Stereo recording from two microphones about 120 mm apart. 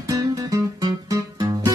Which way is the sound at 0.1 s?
30° right (ahead or behind).